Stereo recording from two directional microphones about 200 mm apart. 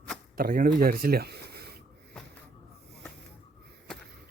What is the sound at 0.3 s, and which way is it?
Speech, 45° right (ahead or behind).